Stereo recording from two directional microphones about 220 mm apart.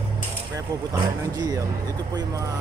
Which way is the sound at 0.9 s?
15° right (ahead or behind).